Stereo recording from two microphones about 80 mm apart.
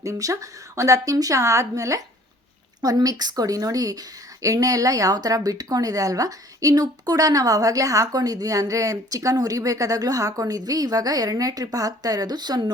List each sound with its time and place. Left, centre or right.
0.0 s speech: right